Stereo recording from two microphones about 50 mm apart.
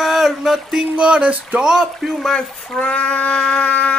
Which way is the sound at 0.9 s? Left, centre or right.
Right.